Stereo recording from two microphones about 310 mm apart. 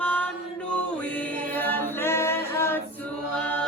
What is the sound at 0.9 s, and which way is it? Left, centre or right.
A capella, centre.